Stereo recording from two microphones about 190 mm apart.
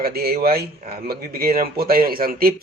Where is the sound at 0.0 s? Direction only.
55° right (ahead or behind).